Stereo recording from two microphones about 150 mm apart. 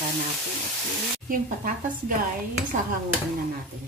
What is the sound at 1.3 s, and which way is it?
Speech, 65° right (ahead or behind).